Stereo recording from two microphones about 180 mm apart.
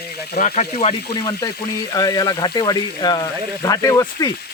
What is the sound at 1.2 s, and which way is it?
Speech, 20° left (ahead or behind).